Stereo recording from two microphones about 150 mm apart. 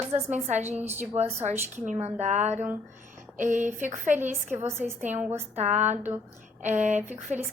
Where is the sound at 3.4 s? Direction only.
55° right (ahead or behind).